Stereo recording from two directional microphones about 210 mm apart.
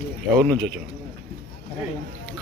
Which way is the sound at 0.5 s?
50° right (ahead or behind).